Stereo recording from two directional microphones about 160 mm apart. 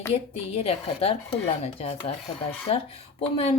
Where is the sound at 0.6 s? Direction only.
40° left (ahead or behind).